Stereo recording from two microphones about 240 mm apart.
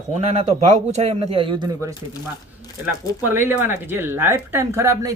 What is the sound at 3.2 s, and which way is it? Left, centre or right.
Speech, centre.